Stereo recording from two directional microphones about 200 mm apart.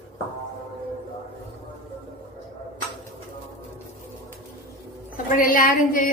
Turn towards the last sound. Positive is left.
turn(degrees=45)  # may be behind; listen again after turning